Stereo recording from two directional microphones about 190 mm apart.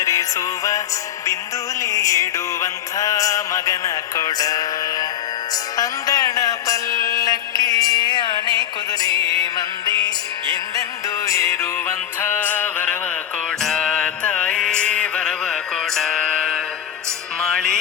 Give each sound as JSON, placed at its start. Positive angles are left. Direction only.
{"t": 0.0, "sound": "music", "side_deg": 15}
{"t": 1.8, "sound": "music", "side_deg": 15}
{"t": 11.3, "sound": "music", "side_deg": 15}
{"t": 13.6, "sound": "mantra", "side_deg": 5}
{"t": 17.4, "sound": "music", "side_deg": 5}